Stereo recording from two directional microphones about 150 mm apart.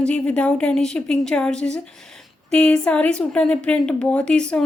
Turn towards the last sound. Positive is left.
turn(degrees=5)  # may be behind; listen again after turning